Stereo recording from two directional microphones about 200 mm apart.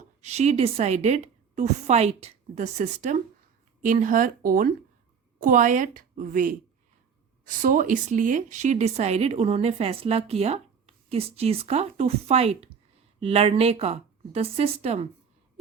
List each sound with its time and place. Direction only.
0.2 s a woman's voice: 35° right (ahead or behind)